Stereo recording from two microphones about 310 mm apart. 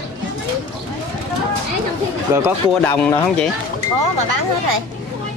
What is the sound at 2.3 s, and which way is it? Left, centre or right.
Speech, centre.